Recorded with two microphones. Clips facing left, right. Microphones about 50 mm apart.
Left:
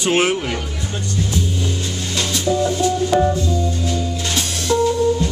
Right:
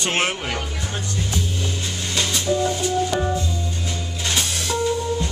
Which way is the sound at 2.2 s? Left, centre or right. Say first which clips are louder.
Left 2 dB; centre.